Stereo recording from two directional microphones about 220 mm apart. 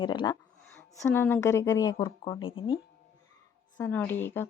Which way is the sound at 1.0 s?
10° left (ahead or behind).